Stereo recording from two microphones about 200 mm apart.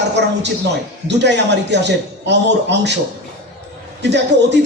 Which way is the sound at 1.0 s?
60° right (ahead or behind).